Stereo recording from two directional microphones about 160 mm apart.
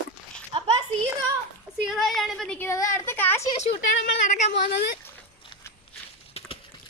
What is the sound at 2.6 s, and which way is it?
Speech, 20° left (ahead or behind).